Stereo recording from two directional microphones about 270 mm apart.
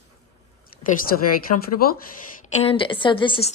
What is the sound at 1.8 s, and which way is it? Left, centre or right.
Speech, left.